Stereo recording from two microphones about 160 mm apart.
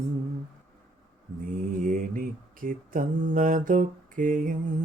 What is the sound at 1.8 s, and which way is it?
Mantra, 55° right (ahead or behind).